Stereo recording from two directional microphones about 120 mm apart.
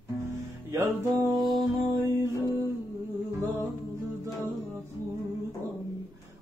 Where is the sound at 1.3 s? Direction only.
40° right (ahead or behind).